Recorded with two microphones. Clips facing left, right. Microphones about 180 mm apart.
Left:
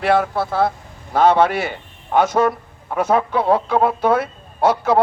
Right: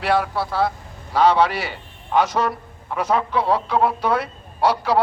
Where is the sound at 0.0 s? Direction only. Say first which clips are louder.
Left 3 dB; 50° left (ahead or behind).